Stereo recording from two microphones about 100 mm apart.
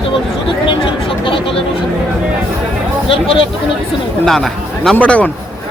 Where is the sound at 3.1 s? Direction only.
65° left (ahead or behind).